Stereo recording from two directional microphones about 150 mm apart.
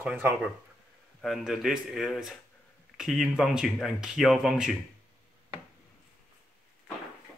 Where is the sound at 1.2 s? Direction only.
Centre (ahead or behind).